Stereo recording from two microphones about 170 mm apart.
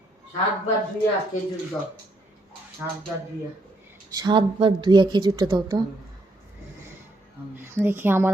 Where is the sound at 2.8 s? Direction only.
10° right (ahead or behind).